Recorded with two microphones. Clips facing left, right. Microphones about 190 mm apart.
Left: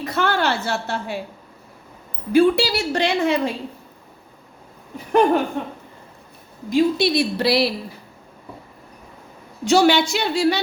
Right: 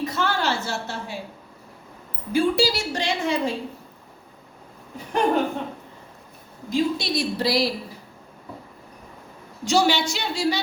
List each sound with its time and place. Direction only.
0.0 s a sound: 65° left (ahead or behind)
2.3 s a woman's voice: 65° left (ahead or behind)
6.7 s a woman's voice: 65° left (ahead or behind)
9.6 s a woman's voice: 60° left (ahead or behind)